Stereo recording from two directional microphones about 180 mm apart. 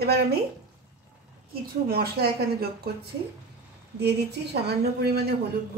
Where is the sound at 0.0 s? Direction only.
60° right (ahead or behind).